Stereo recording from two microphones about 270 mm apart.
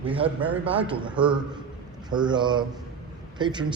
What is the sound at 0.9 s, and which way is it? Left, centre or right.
Speech, centre.